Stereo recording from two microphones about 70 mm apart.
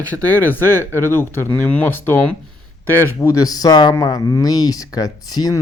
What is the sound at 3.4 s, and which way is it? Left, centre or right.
Speech, left.